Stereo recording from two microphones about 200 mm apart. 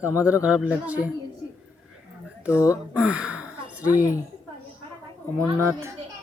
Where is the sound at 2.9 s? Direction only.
5° right (ahead or behind).